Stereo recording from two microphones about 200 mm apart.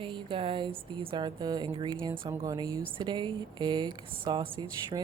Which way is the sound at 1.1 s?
20° right (ahead or behind).